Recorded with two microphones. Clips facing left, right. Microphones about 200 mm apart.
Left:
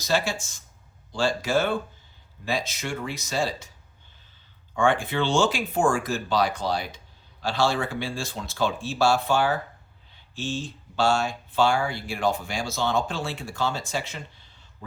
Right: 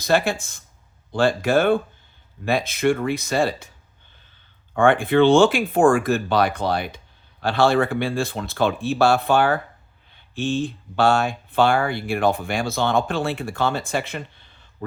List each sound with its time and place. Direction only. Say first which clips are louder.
0.0 s speech: right 6 dB; 55° right (ahead or behind)
4.7 s speech: right 6 dB; 55° right (ahead or behind)